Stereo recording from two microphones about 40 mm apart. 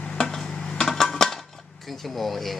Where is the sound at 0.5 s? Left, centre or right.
Left.